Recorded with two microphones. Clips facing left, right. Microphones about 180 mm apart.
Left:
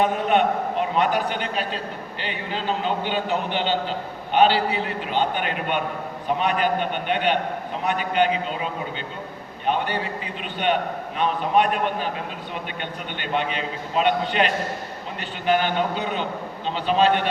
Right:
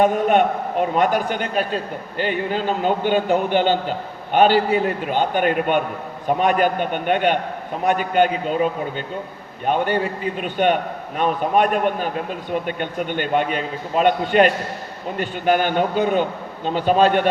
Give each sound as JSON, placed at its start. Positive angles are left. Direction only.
{"t": 0.0, "sound": "a man's voice", "side_deg": -45}